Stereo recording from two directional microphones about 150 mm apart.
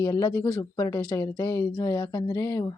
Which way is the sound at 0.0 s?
25° left (ahead or behind).